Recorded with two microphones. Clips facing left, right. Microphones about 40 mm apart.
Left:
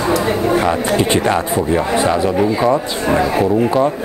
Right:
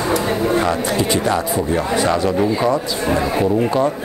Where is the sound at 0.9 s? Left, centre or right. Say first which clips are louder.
Left 3 dB; left.